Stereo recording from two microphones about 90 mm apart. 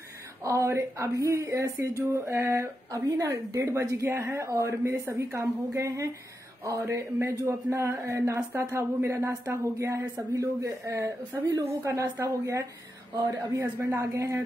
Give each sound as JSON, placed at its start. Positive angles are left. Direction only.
{"t": 0.4, "sound": "speech", "side_deg": -35}
{"t": 13.7, "sound": "speech", "side_deg": -20}
{"t": 14.1, "sound": "speech", "side_deg": -35}